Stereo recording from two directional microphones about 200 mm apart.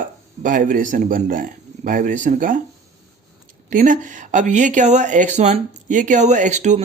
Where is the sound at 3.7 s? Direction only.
40° right (ahead or behind).